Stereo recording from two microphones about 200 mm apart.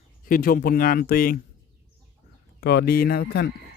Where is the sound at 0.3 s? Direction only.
45° left (ahead or behind).